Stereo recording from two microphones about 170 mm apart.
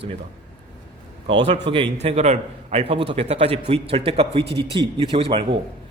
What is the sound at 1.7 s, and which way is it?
A man's voice, 35° right (ahead or behind).